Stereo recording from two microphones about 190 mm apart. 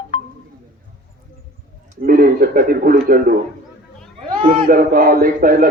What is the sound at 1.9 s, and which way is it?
Speech, 45° right (ahead or behind).